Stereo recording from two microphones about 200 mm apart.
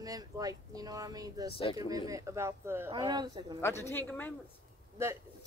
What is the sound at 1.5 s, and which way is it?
Speech, 30° left (ahead or behind).